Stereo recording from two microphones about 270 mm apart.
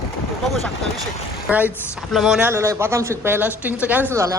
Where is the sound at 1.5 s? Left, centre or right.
Centre.